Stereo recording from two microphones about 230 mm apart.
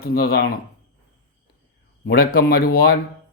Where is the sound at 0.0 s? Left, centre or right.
Left.